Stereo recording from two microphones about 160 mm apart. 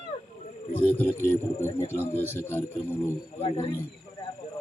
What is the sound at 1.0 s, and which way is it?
A man's voice, 15° left (ahead or behind).